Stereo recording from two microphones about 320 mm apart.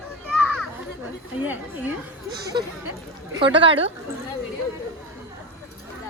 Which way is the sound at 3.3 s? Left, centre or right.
Centre.